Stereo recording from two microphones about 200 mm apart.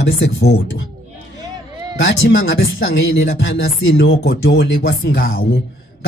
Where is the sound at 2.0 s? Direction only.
65° left (ahead or behind).